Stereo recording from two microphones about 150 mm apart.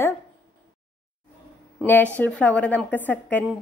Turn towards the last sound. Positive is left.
turn(degrees=10)  # may be behind; listen again after turning